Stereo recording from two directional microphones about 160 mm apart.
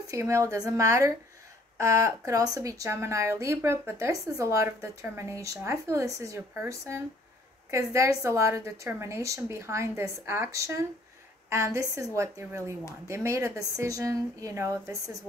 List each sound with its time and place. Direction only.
0.0 s speech: 20° right (ahead or behind)